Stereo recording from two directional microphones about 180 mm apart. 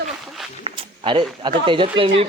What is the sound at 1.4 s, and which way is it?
Speech, 25° right (ahead or behind).